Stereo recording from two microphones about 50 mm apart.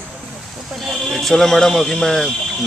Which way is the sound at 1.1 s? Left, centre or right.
Centre.